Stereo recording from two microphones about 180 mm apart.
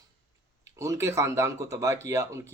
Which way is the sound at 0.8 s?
15° right (ahead or behind).